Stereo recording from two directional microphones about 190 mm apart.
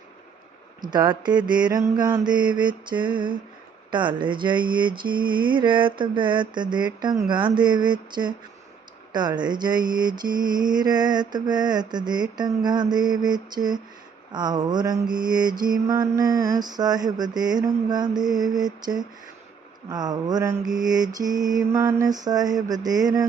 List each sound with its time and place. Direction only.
0.8 s mantra: 20° right (ahead or behind)